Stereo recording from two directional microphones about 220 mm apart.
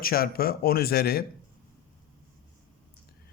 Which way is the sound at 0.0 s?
45° left (ahead or behind).